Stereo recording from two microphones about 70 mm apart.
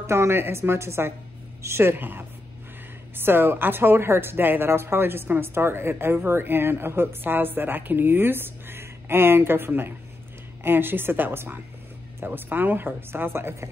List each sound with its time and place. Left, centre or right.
0.0 s a woman's voice: right